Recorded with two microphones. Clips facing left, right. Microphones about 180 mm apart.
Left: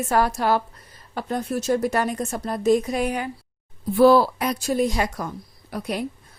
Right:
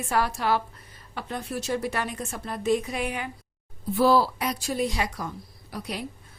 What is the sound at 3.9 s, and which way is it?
Speech, 55° left (ahead or behind).